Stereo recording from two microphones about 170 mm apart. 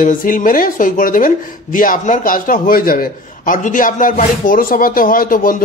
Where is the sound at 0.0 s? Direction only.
50° left (ahead or behind).